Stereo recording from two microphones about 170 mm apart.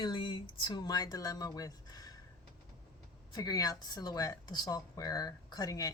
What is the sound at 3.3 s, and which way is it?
Speech, 25° left (ahead or behind).